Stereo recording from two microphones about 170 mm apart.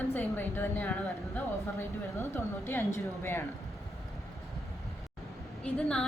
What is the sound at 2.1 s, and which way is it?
A woman's voice, 15° left (ahead or behind).